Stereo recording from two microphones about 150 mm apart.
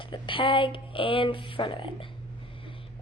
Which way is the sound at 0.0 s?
35° left (ahead or behind).